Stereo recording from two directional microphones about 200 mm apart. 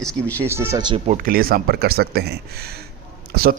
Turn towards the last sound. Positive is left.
turn(degrees=-50)  # may be behind; listen again after turning